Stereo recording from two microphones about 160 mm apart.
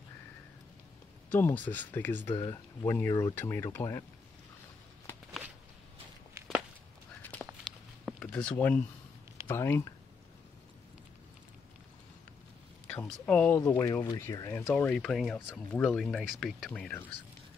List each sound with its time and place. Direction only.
1.3 s speech: 10° left (ahead or behind)
2.3 s speech: 30° left (ahead or behind)
7.2 s a sound: 10° left (ahead or behind)
8.3 s speech: 5° left (ahead or behind)
12.8 s speech: 10° left (ahead or behind)